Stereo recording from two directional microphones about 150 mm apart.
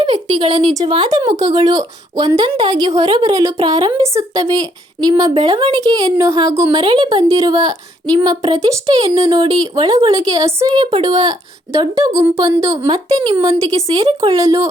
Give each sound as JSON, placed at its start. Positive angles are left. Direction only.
{"t": 0.0, "sound": "speech", "side_deg": -30}
{"t": 9.0, "sound": "speech", "side_deg": -40}
{"t": 9.2, "sound": "speech", "side_deg": -25}
{"t": 10.7, "sound": "speech", "side_deg": -35}